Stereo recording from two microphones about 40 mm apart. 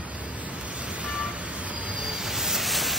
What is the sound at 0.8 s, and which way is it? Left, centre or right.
Vehicle, right.